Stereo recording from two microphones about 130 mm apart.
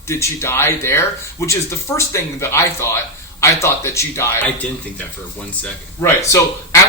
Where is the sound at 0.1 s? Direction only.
20° left (ahead or behind).